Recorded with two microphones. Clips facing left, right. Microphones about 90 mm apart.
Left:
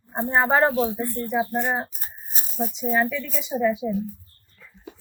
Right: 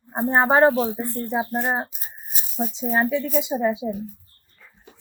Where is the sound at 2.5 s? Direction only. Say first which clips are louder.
Even; 40° right (ahead or behind).